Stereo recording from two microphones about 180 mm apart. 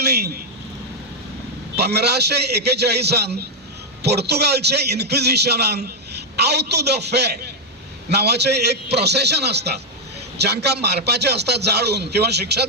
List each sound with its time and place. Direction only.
0.0 s speech: 65° right (ahead or behind)
1.7 s a man's voice: 65° right (ahead or behind)